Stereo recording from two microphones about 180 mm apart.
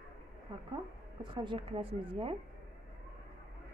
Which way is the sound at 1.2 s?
25° right (ahead or behind).